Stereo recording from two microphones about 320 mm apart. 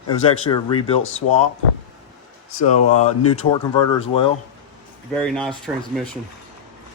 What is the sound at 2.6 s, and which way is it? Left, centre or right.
Speech, left.